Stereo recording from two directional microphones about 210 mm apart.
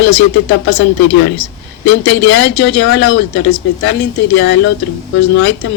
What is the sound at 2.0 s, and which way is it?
Speech, 65° left (ahead or behind).